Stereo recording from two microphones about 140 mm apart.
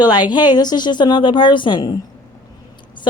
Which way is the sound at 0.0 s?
30° left (ahead or behind).